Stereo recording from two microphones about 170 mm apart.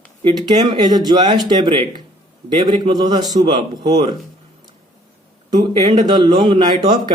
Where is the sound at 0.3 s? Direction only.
25° right (ahead or behind).